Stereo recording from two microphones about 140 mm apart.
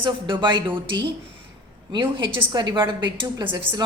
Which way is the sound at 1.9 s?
35° right (ahead or behind).